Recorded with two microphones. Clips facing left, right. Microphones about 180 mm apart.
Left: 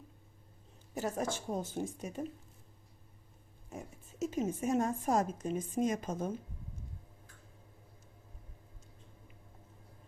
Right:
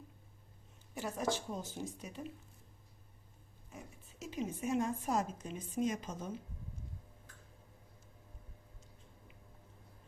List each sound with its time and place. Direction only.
0.9 s a woman's voice: 45° left (ahead or behind)
3.7 s a woman's voice: 45° left (ahead or behind)